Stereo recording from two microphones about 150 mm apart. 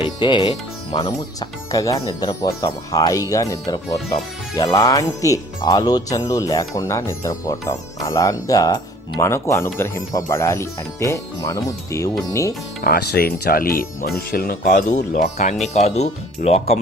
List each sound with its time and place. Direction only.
0.2 s speech: 30° left (ahead or behind)
12.8 s speech: 85° left; by 15.5 s 60° left (ahead or behind)
15.6 s speech: 45° left (ahead or behind)